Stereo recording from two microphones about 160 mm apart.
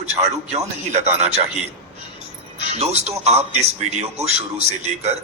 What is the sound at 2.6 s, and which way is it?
A man's voice, 45° right (ahead or behind).